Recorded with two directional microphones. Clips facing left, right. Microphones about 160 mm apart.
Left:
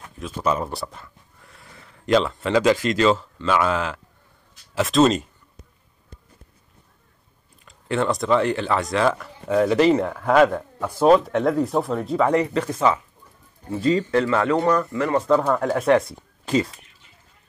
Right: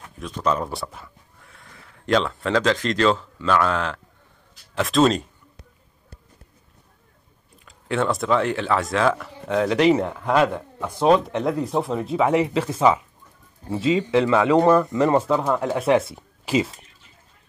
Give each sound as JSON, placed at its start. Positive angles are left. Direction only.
{"t": 0.2, "sound": "speech", "side_deg": 5}
{"t": 7.6, "sound": "speech", "side_deg": 0}
{"t": 13.8, "sound": "speech", "side_deg": -5}
{"t": 15.2, "sound": "speech", "side_deg": -10}